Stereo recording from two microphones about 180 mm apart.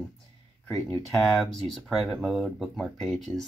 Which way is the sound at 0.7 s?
20° left (ahead or behind).